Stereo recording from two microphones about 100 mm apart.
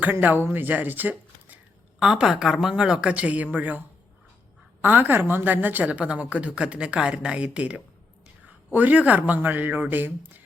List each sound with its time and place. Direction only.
0.0 s a woman's voice: 20° right (ahead or behind)